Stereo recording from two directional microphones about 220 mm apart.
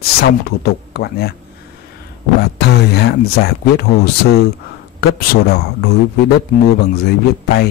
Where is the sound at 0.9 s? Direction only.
45° left (ahead or behind).